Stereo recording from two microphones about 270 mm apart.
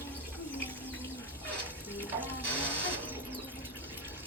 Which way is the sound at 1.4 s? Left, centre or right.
Centre.